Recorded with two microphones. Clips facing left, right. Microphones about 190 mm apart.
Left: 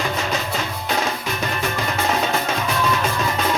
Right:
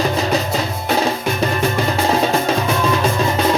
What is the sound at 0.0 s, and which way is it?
Music, 35° right (ahead or behind).